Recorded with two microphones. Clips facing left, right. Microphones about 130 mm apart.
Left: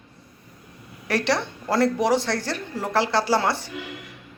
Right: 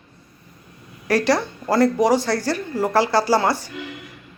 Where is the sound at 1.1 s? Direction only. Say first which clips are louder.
Right 5 dB; centre (ahead or behind).